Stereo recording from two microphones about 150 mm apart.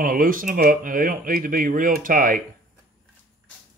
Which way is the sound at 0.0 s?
65° right (ahead or behind).